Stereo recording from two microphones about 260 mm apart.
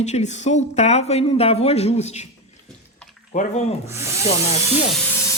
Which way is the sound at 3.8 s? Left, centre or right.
Centre.